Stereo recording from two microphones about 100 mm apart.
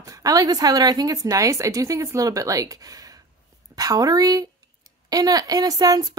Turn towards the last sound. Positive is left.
turn(degrees=-40)  # may be behind; listen again after turning